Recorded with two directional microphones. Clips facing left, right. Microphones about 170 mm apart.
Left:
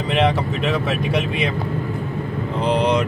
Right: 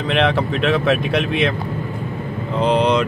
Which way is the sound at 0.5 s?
75° right (ahead or behind).